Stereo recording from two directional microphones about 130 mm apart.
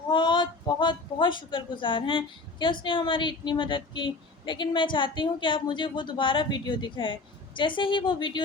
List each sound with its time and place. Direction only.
0.1 s a woman's voice: 35° left (ahead or behind)